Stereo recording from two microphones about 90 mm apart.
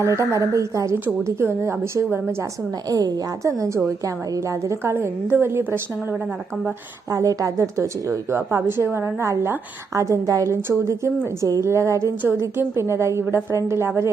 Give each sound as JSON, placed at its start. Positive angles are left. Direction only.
{"t": 0.0, "sound": "a woman's voice", "side_deg": -30}
{"t": 2.9, "sound": "a woman's voice", "side_deg": -40}
{"t": 7.1, "sound": "a woman's voice", "side_deg": -40}